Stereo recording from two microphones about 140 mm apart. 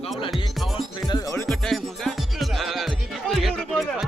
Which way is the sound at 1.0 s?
30° left (ahead or behind).